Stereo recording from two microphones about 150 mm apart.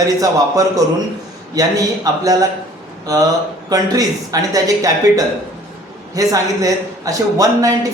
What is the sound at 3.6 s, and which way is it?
A man's voice, 25° right (ahead or behind).